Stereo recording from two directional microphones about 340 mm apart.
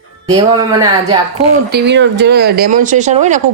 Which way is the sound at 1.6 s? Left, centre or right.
Right.